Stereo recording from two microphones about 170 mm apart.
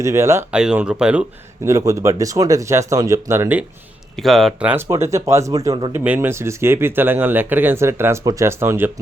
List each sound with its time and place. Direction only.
0.0 s speech: 15° right (ahead or behind)
1.6 s speech: 20° right (ahead or behind)
4.2 s speech: centre (ahead or behind)
4.7 s speech: 15° right (ahead or behind)